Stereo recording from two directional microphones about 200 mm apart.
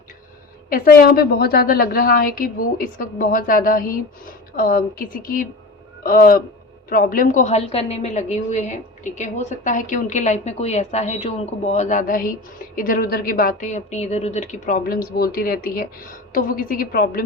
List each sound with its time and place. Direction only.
0.7 s a woman's voice: 45° left (ahead or behind)